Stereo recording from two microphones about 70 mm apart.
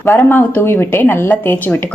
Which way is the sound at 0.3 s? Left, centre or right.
Left.